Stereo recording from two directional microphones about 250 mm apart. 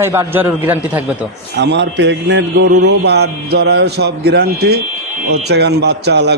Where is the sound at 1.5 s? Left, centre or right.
Right.